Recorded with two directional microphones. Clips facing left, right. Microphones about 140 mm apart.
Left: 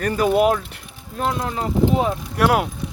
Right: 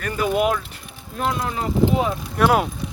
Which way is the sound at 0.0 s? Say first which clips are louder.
Left 4 dB; 35° left (ahead or behind).